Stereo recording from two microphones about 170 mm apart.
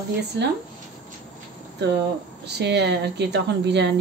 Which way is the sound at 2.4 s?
80° right.